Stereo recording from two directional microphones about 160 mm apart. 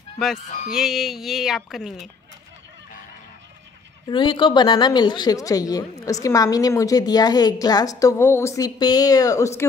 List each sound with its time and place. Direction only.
0.7 s music: centre (ahead or behind)
4.1 s a woman's voice: 30° left (ahead or behind)